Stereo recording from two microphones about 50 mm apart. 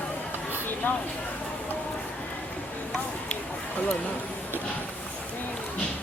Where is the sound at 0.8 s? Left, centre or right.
Left.